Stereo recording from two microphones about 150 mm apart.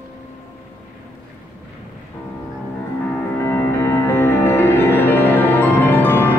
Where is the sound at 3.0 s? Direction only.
10° left (ahead or behind).